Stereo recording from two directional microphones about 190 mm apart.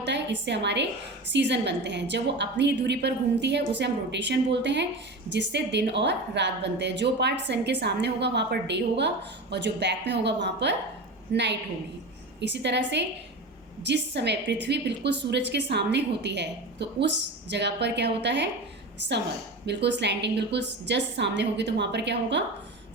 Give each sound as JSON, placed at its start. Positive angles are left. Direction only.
{"t": 0.0, "sound": "a woman's voice", "side_deg": -65}
{"t": 19.6, "sound": "a woman's voice", "side_deg": -65}